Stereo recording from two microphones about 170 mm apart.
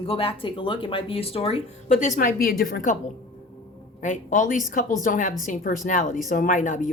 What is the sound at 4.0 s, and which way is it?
A woman's voice, 50° left (ahead or behind).